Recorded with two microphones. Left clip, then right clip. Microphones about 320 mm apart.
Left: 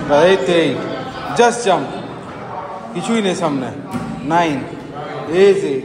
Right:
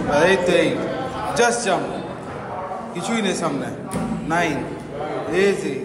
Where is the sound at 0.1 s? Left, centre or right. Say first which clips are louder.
Left 5 dB; left.